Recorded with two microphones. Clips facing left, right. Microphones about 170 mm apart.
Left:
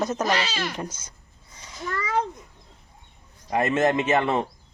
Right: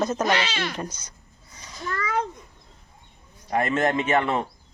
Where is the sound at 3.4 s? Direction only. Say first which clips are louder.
Left 1 dB; 20° left (ahead or behind).